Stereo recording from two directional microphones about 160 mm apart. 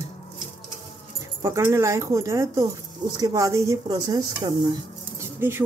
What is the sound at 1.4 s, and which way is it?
Speech, 15° right (ahead or behind).